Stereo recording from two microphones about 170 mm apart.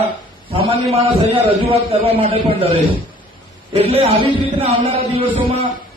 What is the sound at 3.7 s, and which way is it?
A man's voice, 35° right (ahead or behind).